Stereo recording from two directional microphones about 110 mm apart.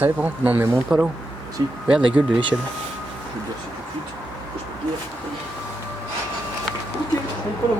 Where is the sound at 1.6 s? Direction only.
40° right (ahead or behind).